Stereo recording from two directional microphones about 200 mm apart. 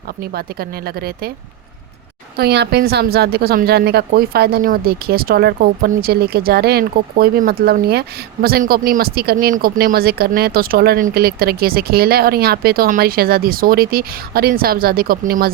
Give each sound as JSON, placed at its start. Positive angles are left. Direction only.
{"t": 0.2, "sound": "a woman's voice", "side_deg": -50}
{"t": 2.3, "sound": "a woman's voice", "side_deg": -55}